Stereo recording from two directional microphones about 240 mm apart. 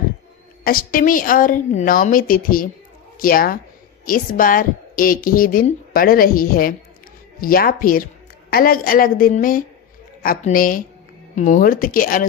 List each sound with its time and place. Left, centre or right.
0.6 s speech: left